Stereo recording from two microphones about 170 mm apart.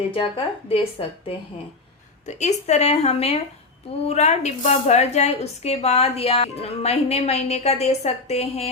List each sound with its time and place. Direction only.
0.1 s a woman's voice: 30° left (ahead or behind)
2.2 s a woman's voice: 40° left (ahead or behind)